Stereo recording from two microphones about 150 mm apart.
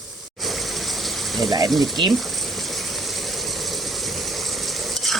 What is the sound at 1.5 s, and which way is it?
Speech, 25° right (ahead or behind).